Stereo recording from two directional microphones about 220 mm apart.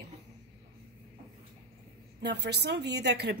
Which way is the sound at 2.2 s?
50° right (ahead or behind).